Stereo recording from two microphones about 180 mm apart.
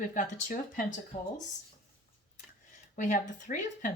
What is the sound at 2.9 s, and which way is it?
Speech, 45° left (ahead or behind).